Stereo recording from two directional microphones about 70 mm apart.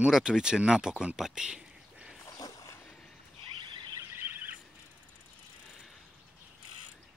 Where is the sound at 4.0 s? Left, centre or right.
Right.